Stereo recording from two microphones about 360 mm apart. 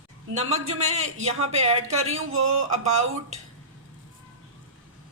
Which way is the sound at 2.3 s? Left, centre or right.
Right.